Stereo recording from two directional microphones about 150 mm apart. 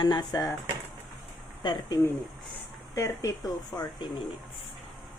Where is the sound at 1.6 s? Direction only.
30° left (ahead or behind).